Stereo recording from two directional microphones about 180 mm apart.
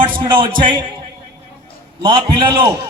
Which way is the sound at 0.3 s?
25° right (ahead or behind).